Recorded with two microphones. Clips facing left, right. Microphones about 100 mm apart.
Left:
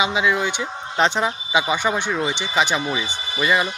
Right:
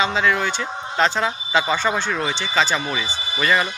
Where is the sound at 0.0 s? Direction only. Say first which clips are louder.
Even; 15° left (ahead or behind).